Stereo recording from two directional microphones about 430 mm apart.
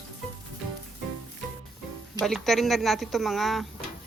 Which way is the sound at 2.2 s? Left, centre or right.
Centre.